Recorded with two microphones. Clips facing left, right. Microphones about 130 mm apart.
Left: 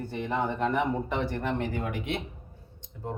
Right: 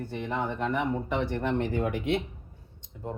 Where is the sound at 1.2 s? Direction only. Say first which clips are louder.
Right 2 dB; 25° right (ahead or behind).